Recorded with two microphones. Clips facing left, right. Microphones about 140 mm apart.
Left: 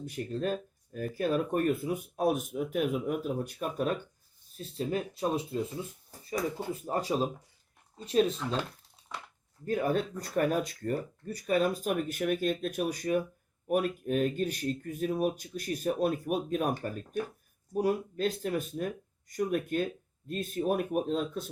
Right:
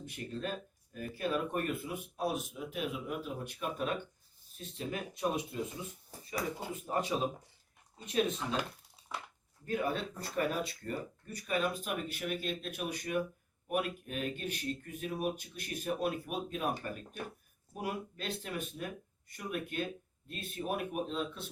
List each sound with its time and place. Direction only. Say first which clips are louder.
0.0 s speech: left 7 dB; 40° left (ahead or behind)
6.7 s speech: left 2 dB; 35° left (ahead or behind)
9.1 s a sound: even; 5° right (ahead or behind)
9.6 s speech: left 5 dB; 45° left (ahead or behind)